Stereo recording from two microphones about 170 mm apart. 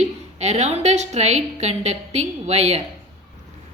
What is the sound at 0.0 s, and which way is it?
A woman's voice, 40° right (ahead or behind).